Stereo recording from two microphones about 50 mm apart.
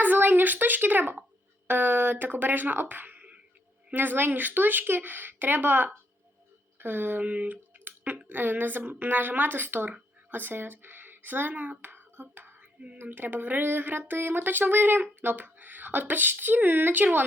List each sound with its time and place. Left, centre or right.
0.0 s speech: right
3.9 s speech: right
6.7 s a sound: right
8.3 s speech: right